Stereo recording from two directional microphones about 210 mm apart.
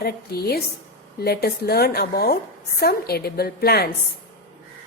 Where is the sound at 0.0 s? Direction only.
50° left (ahead or behind).